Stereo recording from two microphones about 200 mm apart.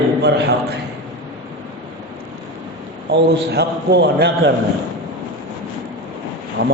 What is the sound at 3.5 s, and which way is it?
A man's voice, 55° right (ahead or behind).